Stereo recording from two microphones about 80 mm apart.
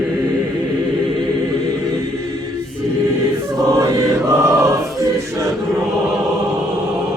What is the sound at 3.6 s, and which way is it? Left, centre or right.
Choir, right.